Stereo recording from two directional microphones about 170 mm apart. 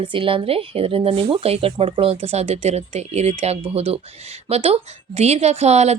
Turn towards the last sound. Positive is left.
turn(degrees=-40)  # may be behind; listen again after turning